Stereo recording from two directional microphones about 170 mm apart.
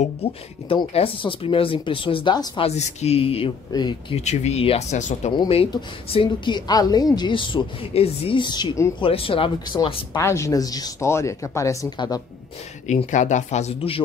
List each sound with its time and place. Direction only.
0.0 s speech: 35° left (ahead or behind)
2.6 s speech: 40° left (ahead or behind)
4.2 s speech: 40° left (ahead or behind); by 8.9 s 20° left (ahead or behind)
9.0 s speech: 30° left (ahead or behind)
12.8 s speech: 45° left (ahead or behind)